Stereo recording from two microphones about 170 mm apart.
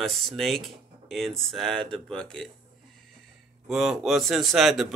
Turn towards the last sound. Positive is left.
turn(degrees=0)  # may be behind; listen again after turning